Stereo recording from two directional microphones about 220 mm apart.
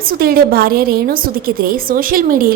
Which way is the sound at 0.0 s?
40° right (ahead or behind).